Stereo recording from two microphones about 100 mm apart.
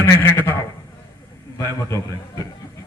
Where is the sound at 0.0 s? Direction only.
25° left (ahead or behind).